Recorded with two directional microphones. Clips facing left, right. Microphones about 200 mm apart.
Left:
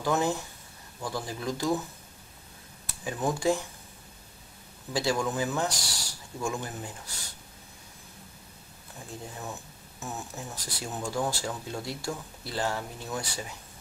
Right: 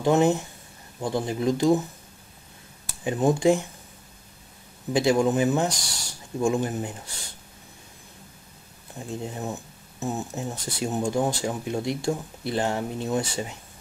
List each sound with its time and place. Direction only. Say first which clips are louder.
0.0 s speech: right 7 dB; 25° right (ahead or behind)
3.0 s speech: right 8 dB; 20° right (ahead or behind)
4.9 s speech: right 8 dB; 20° right (ahead or behind)
9.0 s speech: right 8 dB; 20° right (ahead or behind)